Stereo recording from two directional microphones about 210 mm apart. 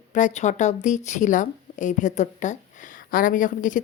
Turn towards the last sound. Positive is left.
turn(degrees=40)  # may be behind; listen again after turning